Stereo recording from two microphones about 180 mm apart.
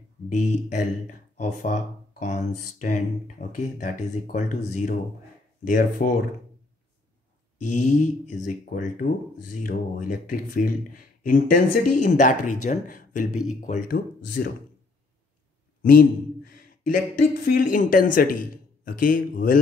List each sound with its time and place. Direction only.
0.3 s speech: 45° left (ahead or behind)
8.3 s speech: 45° left (ahead or behind)
15.8 s a sound: 55° left (ahead or behind)
17.5 s speech: 50° left (ahead or behind)